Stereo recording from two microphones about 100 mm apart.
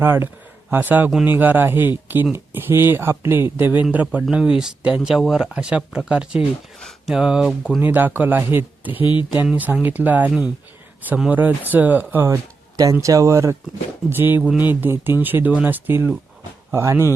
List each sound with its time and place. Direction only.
0.0 s speech: 20° right (ahead or behind); by 7.8 s 5° right (ahead or behind)
7.8 s speech: 20° right (ahead or behind)
12.1 s speech: 30° right (ahead or behind)
14.2 s speech: 20° right (ahead or behind)